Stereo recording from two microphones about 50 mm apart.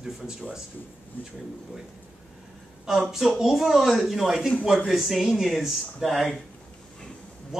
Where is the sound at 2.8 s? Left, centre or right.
Centre.